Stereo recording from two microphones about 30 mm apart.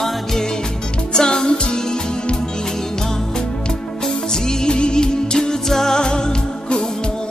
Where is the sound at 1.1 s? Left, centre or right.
Left.